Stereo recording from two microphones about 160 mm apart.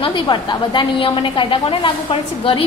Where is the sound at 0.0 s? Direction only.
30° left (ahead or behind).